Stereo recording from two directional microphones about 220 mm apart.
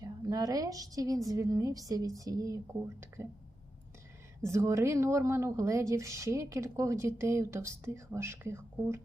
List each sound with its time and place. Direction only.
0.0 s speech: 15° right (ahead or behind)
4.4 s speech: 15° right (ahead or behind)